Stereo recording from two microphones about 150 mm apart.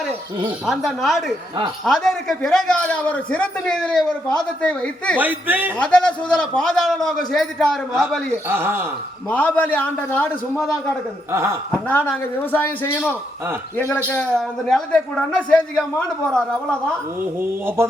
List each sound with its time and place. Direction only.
0.6 s a man's voice: centre (ahead or behind)
5.1 s speech: 10° right (ahead or behind)
5.7 s a man's voice: 5° left (ahead or behind)
8.4 s speech: 15° right (ahead or behind)
9.3 s a man's voice: 10° left (ahead or behind)
11.3 s speech: 20° right (ahead or behind)
11.7 s a man's voice: 10° left (ahead or behind)